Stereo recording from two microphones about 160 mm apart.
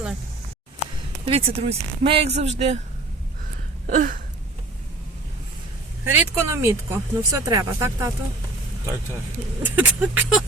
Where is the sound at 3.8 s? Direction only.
60° right (ahead or behind).